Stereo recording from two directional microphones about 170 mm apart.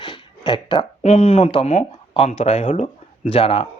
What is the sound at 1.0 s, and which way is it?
Speech, 40° left (ahead or behind).